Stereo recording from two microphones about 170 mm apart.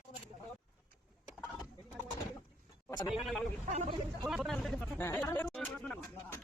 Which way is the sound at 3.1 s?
Centre (ahead or behind).